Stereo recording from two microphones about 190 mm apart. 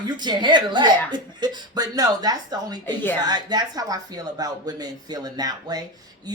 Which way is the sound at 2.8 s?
10° left (ahead or behind).